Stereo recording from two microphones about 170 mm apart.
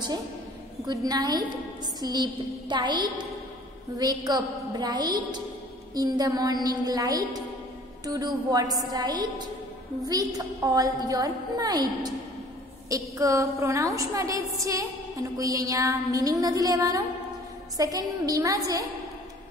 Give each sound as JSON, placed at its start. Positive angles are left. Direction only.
{"t": 0.8, "sound": "a woman's voice", "side_deg": -25}